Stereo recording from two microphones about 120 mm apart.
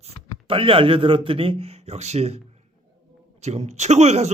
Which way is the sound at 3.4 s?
65° right (ahead or behind).